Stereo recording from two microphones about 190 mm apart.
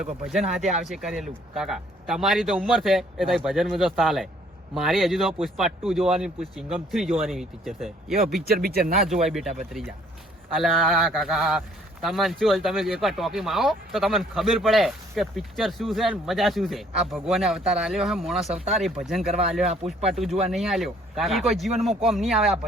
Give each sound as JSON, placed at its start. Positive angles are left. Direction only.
{"t": 0.0, "sound": "speech", "side_deg": 0}
{"t": 8.4, "sound": "speech", "side_deg": -55}
{"t": 9.0, "sound": "speech", "side_deg": 0}